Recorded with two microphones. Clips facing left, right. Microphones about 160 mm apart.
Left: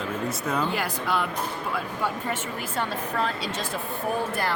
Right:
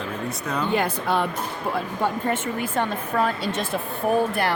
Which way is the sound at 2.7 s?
50° right (ahead or behind).